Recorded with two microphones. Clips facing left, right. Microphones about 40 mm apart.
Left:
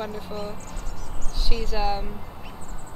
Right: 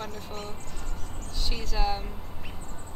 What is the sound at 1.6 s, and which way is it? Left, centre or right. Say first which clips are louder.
Speech: left 4 dB; centre.